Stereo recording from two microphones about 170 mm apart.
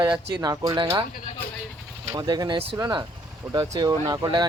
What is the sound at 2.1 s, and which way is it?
Speech, 20° right (ahead or behind).